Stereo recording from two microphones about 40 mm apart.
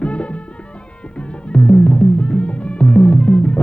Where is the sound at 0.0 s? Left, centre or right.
Left.